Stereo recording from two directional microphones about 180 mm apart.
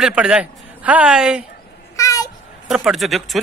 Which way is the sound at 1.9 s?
20° left (ahead or behind).